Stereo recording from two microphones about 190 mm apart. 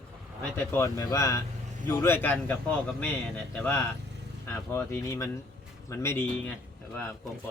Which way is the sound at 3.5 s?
10° left (ahead or behind).